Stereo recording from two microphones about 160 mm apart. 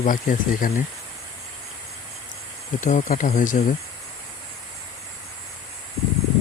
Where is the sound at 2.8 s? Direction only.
50° left (ahead or behind).